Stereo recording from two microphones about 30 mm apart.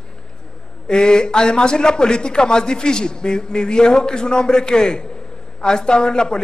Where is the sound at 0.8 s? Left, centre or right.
Left.